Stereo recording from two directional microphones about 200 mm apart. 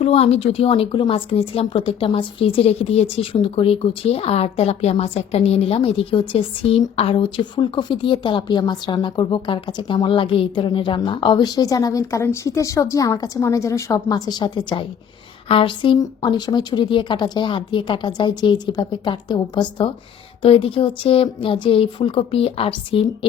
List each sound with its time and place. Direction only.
0.0 s speech: 30° left (ahead or behind)